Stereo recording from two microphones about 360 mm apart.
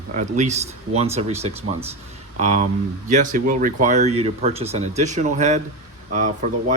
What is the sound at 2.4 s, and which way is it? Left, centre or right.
Speech, centre.